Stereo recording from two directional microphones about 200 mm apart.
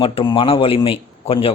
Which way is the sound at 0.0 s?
25° left (ahead or behind).